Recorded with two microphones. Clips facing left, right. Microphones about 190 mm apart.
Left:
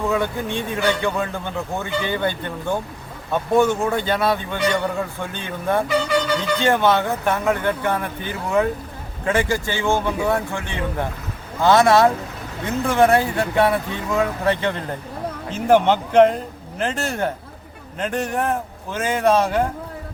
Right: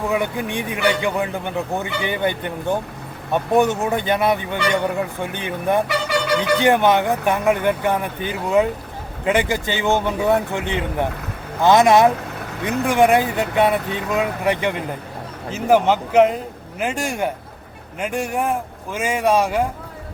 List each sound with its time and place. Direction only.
0.0 s speech: 15° right (ahead or behind)
5.9 s a sound: 70° right (ahead or behind)
6.6 s speech: 15° right (ahead or behind)